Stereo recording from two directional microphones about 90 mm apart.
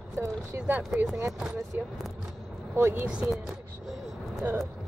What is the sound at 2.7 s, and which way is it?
Speech, 25° right (ahead or behind).